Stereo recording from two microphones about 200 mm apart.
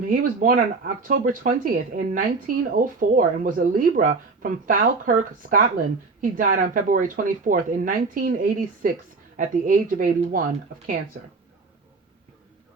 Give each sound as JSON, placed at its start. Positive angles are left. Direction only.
{"t": 0.1, "sound": "speech", "side_deg": -45}